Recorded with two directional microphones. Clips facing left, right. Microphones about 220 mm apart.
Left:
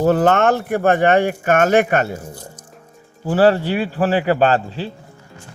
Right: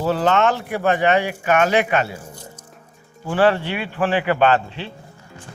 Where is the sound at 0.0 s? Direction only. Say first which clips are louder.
Left 4 dB; 50° left (ahead or behind).